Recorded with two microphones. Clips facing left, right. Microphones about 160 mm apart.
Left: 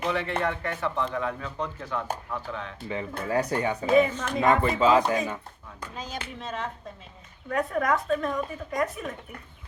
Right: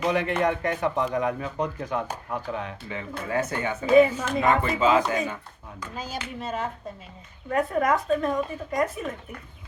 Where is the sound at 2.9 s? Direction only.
35° left (ahead or behind).